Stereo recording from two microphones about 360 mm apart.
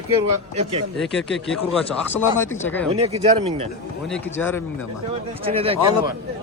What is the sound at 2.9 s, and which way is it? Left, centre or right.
Speech, centre.